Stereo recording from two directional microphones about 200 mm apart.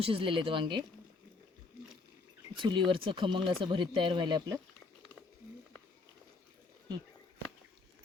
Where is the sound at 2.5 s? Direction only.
25° right (ahead or behind).